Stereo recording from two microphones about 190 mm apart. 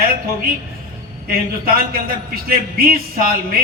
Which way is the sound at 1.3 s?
50° right (ahead or behind).